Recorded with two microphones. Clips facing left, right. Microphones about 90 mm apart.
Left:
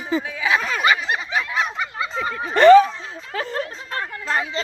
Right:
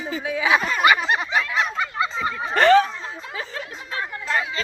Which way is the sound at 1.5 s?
10° left (ahead or behind).